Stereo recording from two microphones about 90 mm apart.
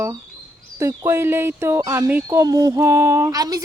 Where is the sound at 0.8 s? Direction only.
50° right (ahead or behind).